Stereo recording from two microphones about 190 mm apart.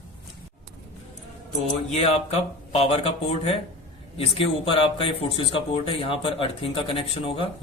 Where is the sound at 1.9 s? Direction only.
35° left (ahead or behind).